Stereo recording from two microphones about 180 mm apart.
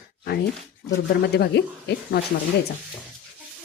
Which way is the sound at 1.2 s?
65° left (ahead or behind).